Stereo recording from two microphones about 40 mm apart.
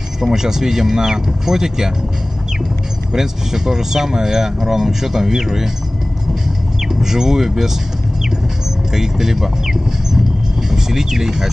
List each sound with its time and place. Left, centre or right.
0.2 s speech: centre
3.1 s speech: centre
7.0 s speech: centre
8.9 s vehicle: centre
10.7 s speech: centre